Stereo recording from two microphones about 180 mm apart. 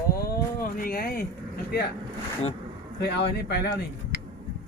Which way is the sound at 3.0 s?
65° left (ahead or behind).